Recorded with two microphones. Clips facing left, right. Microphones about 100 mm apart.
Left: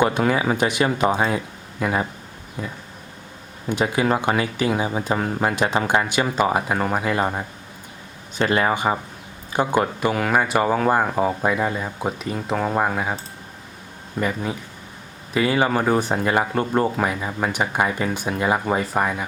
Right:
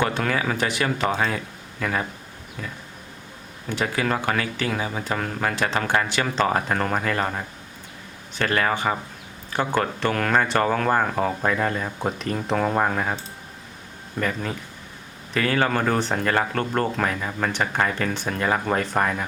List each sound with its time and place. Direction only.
0.0 s speech: 20° left (ahead or behind)
14.2 s speech: 15° left (ahead or behind)